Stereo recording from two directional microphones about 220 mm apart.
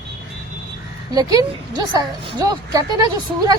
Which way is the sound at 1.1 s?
15° right (ahead or behind).